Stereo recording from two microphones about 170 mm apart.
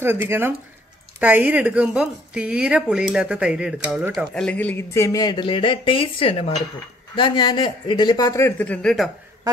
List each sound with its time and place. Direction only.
0.0 s a woman's voice: 15° right (ahead or behind); by 9.1 s centre (ahead or behind)